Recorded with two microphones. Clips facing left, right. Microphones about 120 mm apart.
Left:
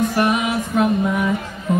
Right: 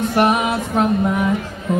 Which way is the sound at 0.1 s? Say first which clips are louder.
Right 2 dB; 30° right (ahead or behind).